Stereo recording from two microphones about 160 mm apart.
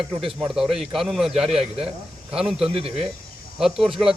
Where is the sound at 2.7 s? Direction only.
35° right (ahead or behind).